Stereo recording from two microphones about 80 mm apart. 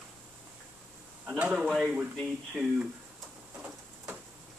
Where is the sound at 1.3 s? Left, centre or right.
Centre.